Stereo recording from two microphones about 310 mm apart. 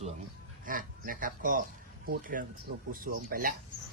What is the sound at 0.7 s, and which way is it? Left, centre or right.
Speech, right.